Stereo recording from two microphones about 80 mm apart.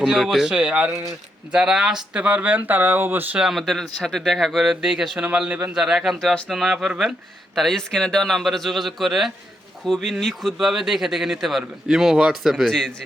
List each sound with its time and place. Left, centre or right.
0.0 s speech: centre; by 3.2 s right
3.3 s speech: centre